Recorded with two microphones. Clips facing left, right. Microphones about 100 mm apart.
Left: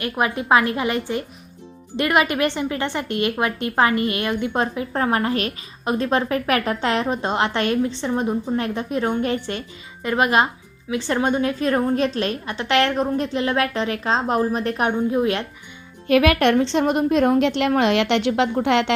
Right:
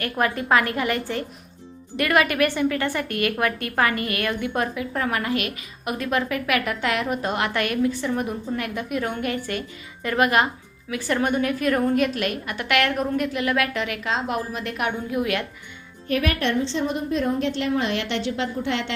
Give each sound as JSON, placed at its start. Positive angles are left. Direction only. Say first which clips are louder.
{"t": 0.0, "sound": "a woman's voice", "louder": "left 1 dB", "side_deg": 20}
{"t": 16.0, "sound": "a woman's voice", "louder": "left 7 dB", "side_deg": 90}